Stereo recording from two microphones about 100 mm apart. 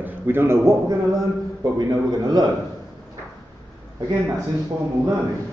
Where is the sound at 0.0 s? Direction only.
20° right (ahead or behind); by 2.4 s 40° right (ahead or behind).